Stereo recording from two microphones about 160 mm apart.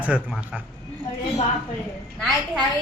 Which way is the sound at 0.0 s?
10° right (ahead or behind).